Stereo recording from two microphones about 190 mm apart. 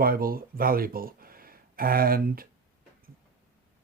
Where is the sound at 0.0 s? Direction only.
50° right (ahead or behind).